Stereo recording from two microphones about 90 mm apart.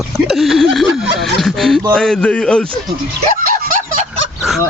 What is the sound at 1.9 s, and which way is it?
Speech, 10° left (ahead or behind).